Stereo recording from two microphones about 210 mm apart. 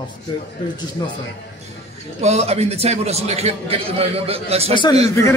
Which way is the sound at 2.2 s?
30° right (ahead or behind).